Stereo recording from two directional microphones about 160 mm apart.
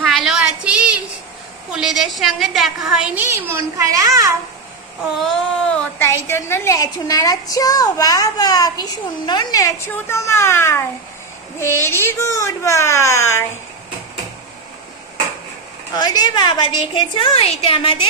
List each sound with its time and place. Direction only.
0.0 s a sound: centre (ahead or behind)
1.7 s a woman's voice: 5° right (ahead or behind)
3.3 s a child's voice: 15° right (ahead or behind)
5.2 s speech: 5° left (ahead or behind)
6.0 s a woman's voice: 15° left (ahead or behind)
15.9 s a woman's voice: 25° left (ahead or behind)